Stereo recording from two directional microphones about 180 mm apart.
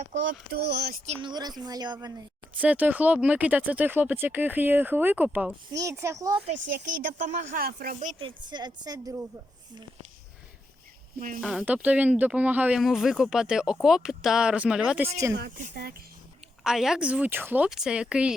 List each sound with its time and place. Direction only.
0.1 s speech: 65° right (ahead or behind)
1.0 s speech: 35° right (ahead or behind)
1.3 s a woman's voice: 20° right (ahead or behind)
2.6 s speech: 10° right (ahead or behind)
7.0 s speech: 45° right (ahead or behind)
8.2 s a woman's voice: 25° right (ahead or behind)
11.3 s speech: 5° right (ahead or behind)
15.4 s speech: 50° right (ahead or behind)
16.6 s speech: centre (ahead or behind)